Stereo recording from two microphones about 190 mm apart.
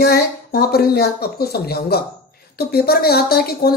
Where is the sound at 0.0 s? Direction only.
55° left (ahead or behind).